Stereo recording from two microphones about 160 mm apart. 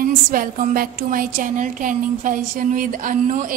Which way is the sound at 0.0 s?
60° right (ahead or behind).